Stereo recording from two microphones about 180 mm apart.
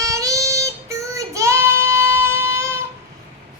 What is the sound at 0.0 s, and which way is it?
Child singing, 20° right (ahead or behind).